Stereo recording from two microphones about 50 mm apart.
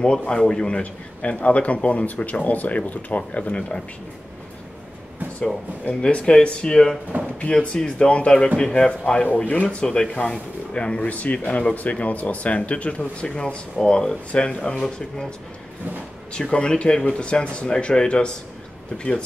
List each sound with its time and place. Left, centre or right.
0.0 s a man's voice: centre
6.0 s a man's voice: centre
9.3 s a man's voice: left; by 15.3 s centre
16.3 s a man's voice: centre